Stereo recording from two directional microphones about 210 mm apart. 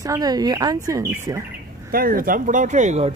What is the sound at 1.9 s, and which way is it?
Speech, 45° right (ahead or behind).